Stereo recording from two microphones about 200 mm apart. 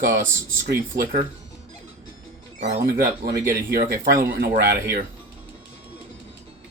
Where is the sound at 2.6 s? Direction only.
40° right (ahead or behind).